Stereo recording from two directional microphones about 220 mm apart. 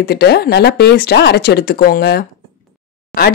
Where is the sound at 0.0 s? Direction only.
45° left (ahead or behind).